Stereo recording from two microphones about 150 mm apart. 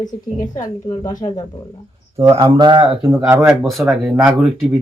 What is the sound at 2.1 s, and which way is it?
Speech, 25° right (ahead or behind).